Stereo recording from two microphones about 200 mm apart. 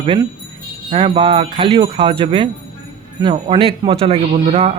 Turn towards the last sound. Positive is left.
turn(degrees=-30)  # may be behind; listen again after turning